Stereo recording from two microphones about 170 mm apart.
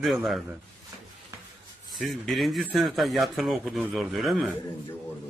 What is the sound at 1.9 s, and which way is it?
Speech, centre (ahead or behind).